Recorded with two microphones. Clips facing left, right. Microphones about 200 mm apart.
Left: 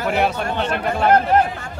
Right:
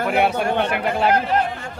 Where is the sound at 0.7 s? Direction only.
10° right (ahead or behind).